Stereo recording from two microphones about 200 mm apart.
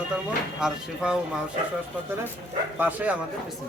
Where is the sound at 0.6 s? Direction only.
5° right (ahead or behind).